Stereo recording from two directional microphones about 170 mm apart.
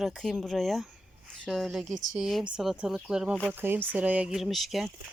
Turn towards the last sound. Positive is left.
turn(degrees=0)  # may be behind; listen again after turning